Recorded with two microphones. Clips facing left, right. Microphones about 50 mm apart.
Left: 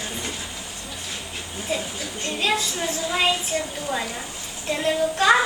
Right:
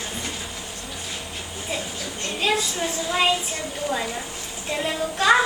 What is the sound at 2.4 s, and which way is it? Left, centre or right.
Child singing, centre.